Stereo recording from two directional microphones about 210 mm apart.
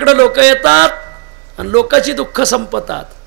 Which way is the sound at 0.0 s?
15° right (ahead or behind).